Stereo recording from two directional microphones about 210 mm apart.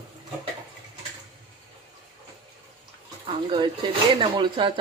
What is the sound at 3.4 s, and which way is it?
Speech, 25° right (ahead or behind).